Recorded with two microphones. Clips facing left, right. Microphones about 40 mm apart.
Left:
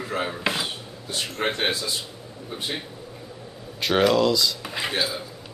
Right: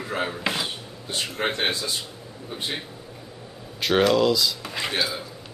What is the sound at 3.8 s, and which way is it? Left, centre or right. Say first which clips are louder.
Speech: even; centre.